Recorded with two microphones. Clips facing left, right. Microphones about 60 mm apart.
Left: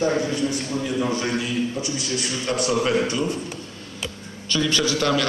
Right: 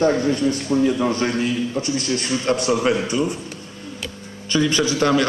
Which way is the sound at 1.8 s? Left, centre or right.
Right.